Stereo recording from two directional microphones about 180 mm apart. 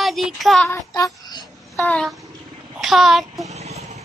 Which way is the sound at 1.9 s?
5° left (ahead or behind).